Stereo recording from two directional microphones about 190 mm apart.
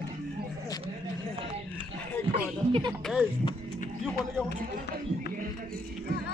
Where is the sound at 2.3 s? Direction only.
30° right (ahead or behind).